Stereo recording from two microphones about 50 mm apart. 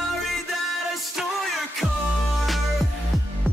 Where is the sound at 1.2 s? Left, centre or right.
Centre.